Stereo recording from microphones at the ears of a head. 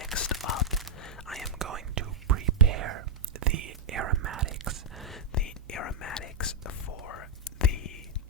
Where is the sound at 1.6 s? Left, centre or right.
Right.